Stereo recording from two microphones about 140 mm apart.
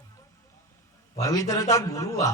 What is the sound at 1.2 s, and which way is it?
A man's voice, 25° left (ahead or behind).